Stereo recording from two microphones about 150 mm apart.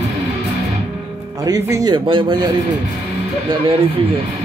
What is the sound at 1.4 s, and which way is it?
Speech, 25° right (ahead or behind).